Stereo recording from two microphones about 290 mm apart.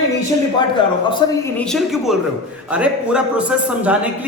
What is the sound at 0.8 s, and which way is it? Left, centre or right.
Speech, centre.